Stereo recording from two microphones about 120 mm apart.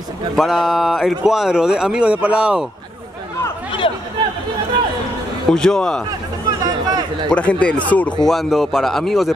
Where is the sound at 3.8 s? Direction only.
45° left (ahead or behind).